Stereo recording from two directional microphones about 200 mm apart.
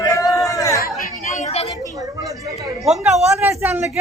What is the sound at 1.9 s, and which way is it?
Speech, 15° right (ahead or behind).